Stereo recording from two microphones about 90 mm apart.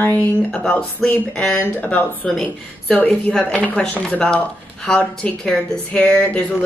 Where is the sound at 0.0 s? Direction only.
20° left (ahead or behind).